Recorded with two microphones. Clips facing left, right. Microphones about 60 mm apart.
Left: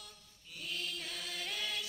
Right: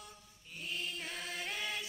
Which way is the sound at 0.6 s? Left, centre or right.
Right.